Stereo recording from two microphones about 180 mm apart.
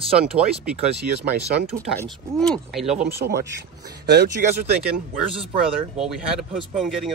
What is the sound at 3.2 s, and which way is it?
Speech, 60° right (ahead or behind).